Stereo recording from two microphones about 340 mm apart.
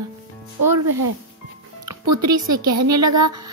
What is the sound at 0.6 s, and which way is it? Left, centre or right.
Speech, right.